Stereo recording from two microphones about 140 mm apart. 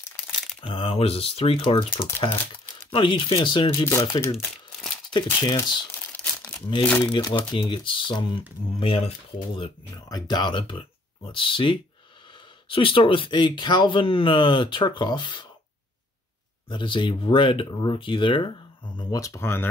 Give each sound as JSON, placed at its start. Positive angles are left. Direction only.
{"t": 0.6, "sound": "speech", "side_deg": 40}
{"t": 5.9, "sound": "crumpling", "side_deg": 10}
{"t": 7.0, "sound": "speech", "side_deg": 30}
{"t": 10.0, "sound": "speech", "side_deg": 30}
{"t": 16.6, "sound": "speech", "side_deg": 35}